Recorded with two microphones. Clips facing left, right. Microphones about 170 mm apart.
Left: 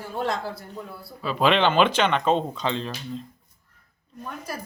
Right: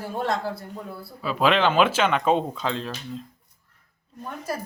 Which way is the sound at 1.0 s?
5° right (ahead or behind).